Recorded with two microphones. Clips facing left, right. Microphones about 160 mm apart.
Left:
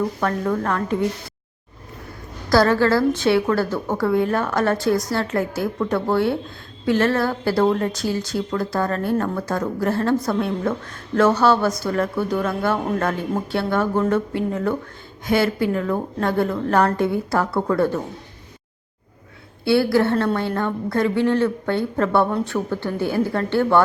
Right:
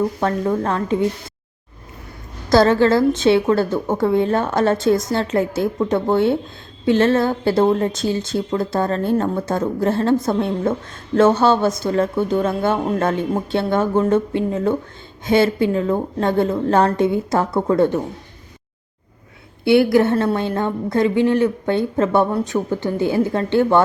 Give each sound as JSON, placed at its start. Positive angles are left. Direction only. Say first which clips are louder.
{"t": 0.2, "sound": "a woman's voice", "louder": "right 2 dB", "side_deg": -25}
{"t": 2.5, "sound": "a woman's voice", "louder": "right 3 dB", "side_deg": -20}
{"t": 19.6, "sound": "a woman's voice", "louder": "right 4 dB", "side_deg": -20}